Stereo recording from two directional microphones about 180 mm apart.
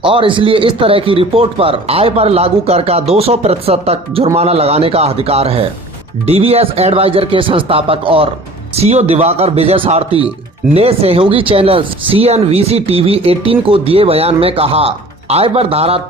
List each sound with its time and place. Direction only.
0.0 s speech: 30° right (ahead or behind)